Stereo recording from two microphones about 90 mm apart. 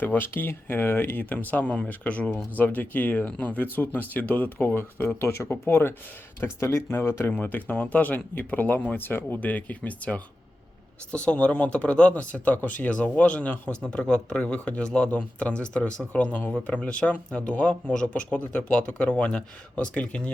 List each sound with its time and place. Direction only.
0.0 s speech: 20° left (ahead or behind)